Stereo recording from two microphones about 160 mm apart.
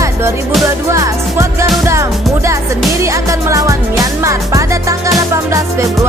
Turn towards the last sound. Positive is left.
turn(degrees=-20)  # may be behind; listen again after turning